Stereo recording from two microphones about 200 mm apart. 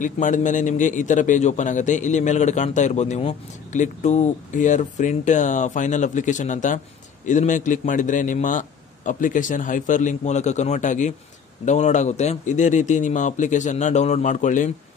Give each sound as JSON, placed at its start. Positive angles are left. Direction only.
{"t": 0.0, "sound": "a man's voice", "side_deg": 40}